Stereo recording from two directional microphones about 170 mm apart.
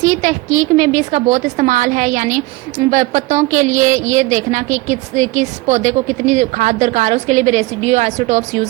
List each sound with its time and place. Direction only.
0.0 s a woman's voice: 45° right (ahead or behind)